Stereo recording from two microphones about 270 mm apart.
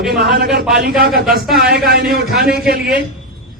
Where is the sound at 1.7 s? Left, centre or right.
Right.